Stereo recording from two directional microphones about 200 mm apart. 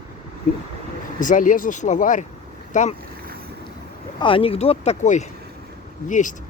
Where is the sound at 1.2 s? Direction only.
40° left (ahead or behind).